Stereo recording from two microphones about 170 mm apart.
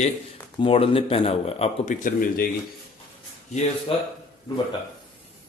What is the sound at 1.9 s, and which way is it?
Speech, 55° left (ahead or behind).